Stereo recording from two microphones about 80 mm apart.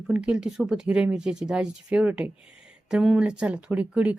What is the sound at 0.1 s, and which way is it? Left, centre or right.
Speech, centre.